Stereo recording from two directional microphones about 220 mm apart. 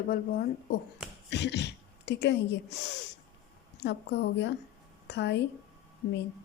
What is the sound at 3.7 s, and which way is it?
Speech, 50° left (ahead or behind).